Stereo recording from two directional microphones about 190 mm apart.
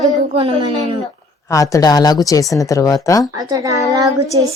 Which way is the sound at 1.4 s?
15° left (ahead or behind).